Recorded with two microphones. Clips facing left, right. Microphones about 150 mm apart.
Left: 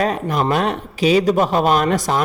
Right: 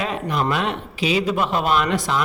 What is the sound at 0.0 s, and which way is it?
A man's voice, 40° left (ahead or behind).